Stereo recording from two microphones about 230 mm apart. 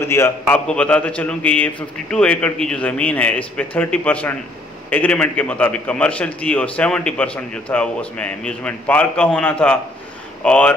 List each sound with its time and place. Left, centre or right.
0.0 s a man's voice: centre